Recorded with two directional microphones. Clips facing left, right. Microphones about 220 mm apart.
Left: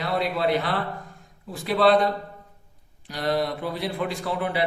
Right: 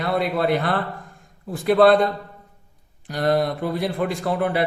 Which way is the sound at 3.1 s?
50° right (ahead or behind).